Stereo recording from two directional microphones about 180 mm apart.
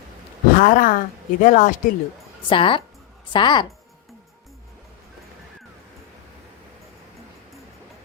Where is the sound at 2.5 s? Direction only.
30° left (ahead or behind).